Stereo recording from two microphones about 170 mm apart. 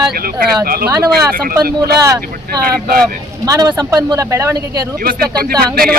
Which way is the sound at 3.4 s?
20° right (ahead or behind).